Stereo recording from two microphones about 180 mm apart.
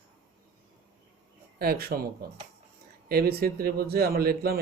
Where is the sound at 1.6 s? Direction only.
60° right (ahead or behind).